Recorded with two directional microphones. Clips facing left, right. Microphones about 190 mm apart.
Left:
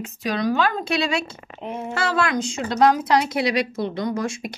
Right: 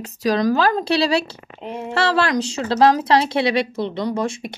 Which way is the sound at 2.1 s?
35° right (ahead or behind).